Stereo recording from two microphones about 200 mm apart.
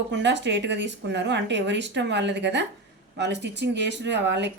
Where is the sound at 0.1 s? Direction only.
60° right (ahead or behind).